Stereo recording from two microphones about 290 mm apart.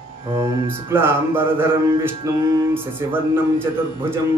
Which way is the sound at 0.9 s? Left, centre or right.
Centre.